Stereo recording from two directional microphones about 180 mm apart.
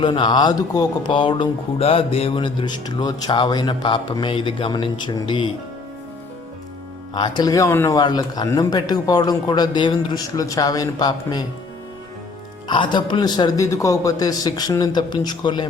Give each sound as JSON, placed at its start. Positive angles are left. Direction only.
{"t": 0.0, "sound": "speech", "side_deg": 25}
{"t": 7.1, "sound": "speech", "side_deg": 25}
{"t": 12.6, "sound": "speech", "side_deg": 25}